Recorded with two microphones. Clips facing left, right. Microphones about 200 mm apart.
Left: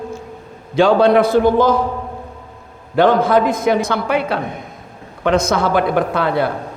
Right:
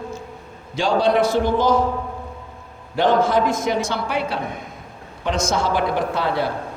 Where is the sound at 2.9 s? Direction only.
60° left (ahead or behind).